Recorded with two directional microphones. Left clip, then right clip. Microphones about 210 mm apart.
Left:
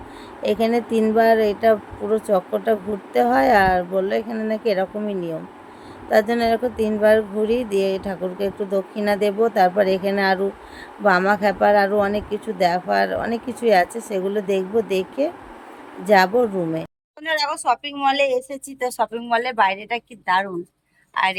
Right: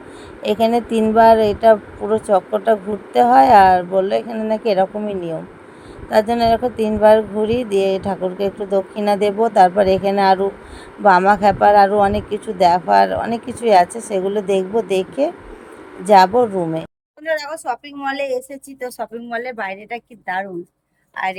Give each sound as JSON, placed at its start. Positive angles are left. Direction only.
{"t": 0.4, "sound": "speech", "side_deg": -15}